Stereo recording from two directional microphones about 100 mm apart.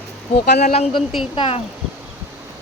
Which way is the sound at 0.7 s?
90° left.